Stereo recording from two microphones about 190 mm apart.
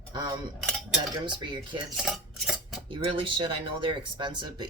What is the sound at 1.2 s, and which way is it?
Speech, 25° right (ahead or behind).